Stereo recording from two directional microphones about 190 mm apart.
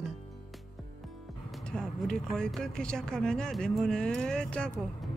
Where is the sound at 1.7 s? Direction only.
5° left (ahead or behind).